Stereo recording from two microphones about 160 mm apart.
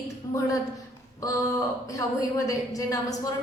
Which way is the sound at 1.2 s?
20° left (ahead or behind).